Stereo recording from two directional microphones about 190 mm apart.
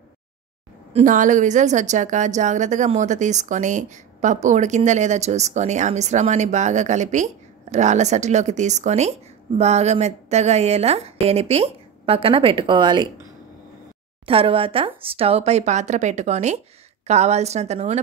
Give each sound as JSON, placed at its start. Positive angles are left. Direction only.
{"t": 0.9, "sound": "a woman's voice", "side_deg": -40}
{"t": 14.2, "sound": "a woman's voice", "side_deg": -30}